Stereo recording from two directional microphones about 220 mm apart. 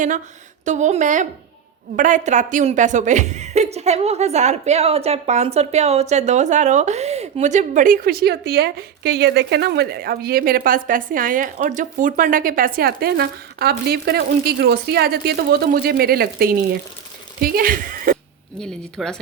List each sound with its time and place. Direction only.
0.6 s a woman's voice: 35° right (ahead or behind)
18.6 s speech: 5° left (ahead or behind)